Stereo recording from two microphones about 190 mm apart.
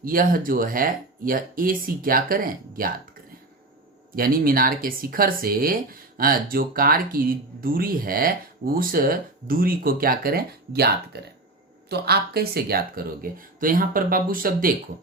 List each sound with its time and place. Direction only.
0.0 s speech: 50° right (ahead or behind)
4.1 s a woman's voice: 50° right (ahead or behind)